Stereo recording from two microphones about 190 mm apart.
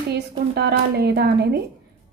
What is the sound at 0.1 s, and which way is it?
A woman's voice, 60° right (ahead or behind).